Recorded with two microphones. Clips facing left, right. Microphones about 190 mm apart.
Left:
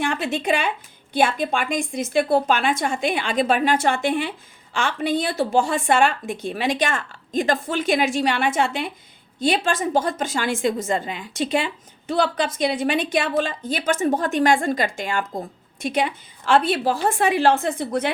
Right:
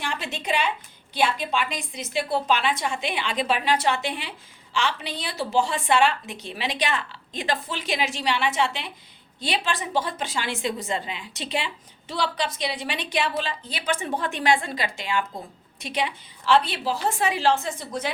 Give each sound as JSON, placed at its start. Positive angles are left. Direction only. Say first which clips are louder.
{"t": 0.0, "sound": "a woman's voice", "louder": "left 8 dB", "side_deg": 50}